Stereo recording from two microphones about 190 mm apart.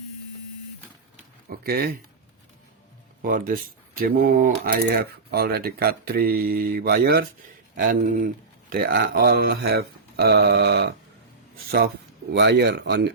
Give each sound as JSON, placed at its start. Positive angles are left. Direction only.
{"t": 1.5, "sound": "speech", "side_deg": -55}
{"t": 3.2, "sound": "speech", "side_deg": -50}
{"t": 12.3, "sound": "speech", "side_deg": -65}